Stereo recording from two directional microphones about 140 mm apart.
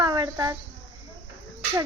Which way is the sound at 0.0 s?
30° right (ahead or behind).